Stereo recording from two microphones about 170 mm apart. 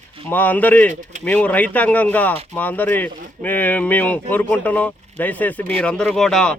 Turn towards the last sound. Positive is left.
turn(degrees=5)  # may be behind; listen again after turning